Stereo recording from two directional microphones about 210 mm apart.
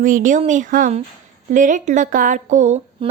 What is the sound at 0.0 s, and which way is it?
Speech, 40° right (ahead or behind).